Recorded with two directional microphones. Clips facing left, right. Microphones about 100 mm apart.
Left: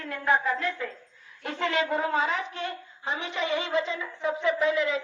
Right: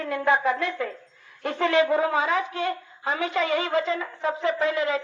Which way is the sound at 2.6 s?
50° right (ahead or behind).